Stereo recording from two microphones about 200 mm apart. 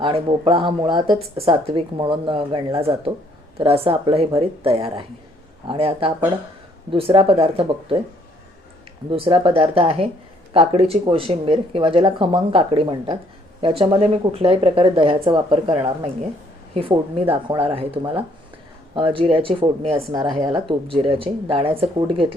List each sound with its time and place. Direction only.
0.0 s speech: 25° right (ahead or behind)
9.0 s speech: 25° right (ahead or behind)